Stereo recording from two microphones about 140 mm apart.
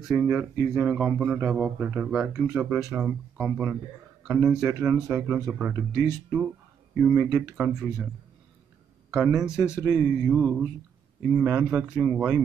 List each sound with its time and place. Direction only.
0.1 s speech: 10° right (ahead or behind)
7.0 s speech: 10° right (ahead or behind)
7.2 s speech: 25° right (ahead or behind)
7.5 s speech: 10° right (ahead or behind)
9.1 s speech: 5° right (ahead or behind)